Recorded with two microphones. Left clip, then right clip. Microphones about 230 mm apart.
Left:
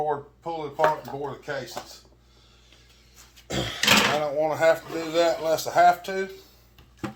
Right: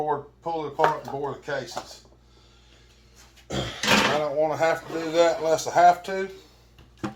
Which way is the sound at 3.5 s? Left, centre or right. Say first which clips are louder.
Left 2 dB; left.